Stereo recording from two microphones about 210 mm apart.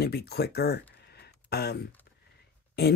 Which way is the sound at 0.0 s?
50° left (ahead or behind).